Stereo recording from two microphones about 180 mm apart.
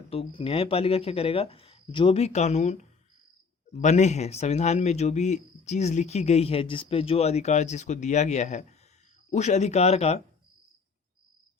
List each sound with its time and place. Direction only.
0.1 s speech: 30° left (ahead or behind)